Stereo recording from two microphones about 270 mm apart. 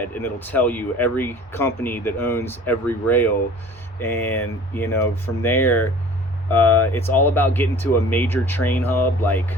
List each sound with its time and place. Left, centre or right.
0.0 s speech: centre